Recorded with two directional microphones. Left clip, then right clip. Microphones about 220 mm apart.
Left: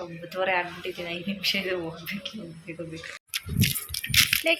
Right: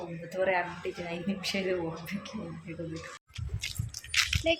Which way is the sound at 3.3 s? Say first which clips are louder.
Left 13 dB; 15° right (ahead or behind).